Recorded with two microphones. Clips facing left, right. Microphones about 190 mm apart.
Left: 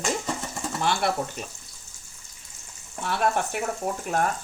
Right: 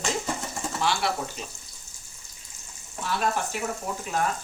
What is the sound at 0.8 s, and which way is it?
Speech, 55° left (ahead or behind).